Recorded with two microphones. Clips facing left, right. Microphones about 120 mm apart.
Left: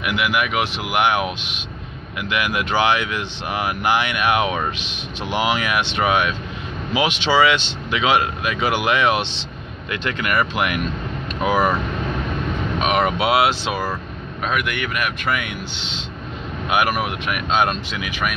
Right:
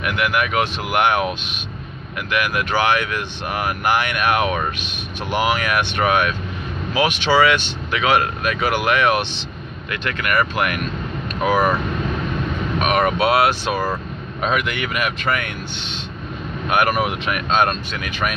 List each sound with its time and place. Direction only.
0.0 s speech: 10° left (ahead or behind)
12.7 s speech: 15° left (ahead or behind)
14.4 s speech: centre (ahead or behind)
16.6 s speech: 10° left (ahead or behind)